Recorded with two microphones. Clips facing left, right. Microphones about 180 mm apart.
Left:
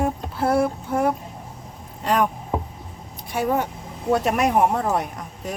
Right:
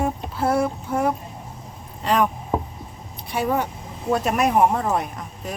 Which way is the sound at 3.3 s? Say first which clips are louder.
Even; 50° left (ahead or behind).